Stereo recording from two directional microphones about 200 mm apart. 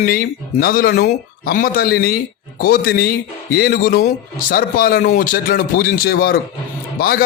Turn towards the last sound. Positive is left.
turn(degrees=50)  # may be behind; listen again after turning